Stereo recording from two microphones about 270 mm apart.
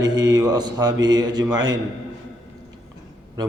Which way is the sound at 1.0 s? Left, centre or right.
Centre.